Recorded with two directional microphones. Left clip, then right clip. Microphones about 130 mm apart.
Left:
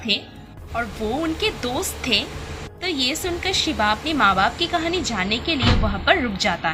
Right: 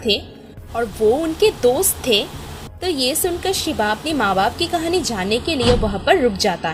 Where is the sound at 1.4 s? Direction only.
50° right (ahead or behind).